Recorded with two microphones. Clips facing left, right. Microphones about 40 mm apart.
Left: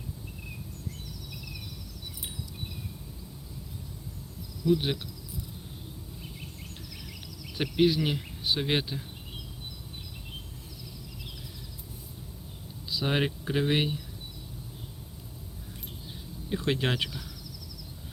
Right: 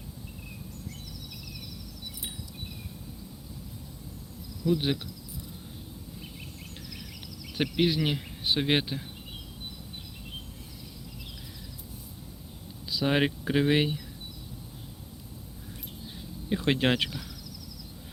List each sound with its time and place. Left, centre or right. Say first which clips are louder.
4.6 s speech: left 1 dB; centre
7.6 s speech: left 1 dB; right
13.1 s speech: right 3 dB; right
16.5 s speech: right 3 dB; right